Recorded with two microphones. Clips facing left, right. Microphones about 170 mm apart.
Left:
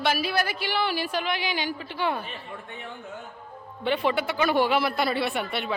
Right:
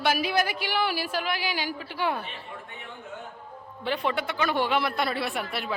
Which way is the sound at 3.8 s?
Centre (ahead or behind).